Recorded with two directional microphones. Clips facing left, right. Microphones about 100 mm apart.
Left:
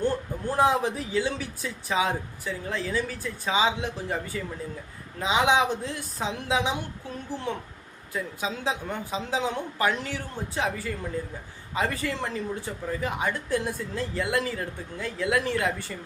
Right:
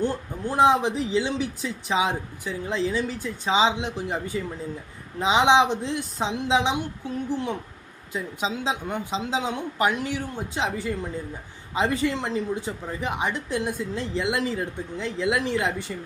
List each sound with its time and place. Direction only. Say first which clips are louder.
0.0 s speech: even; 20° right (ahead or behind)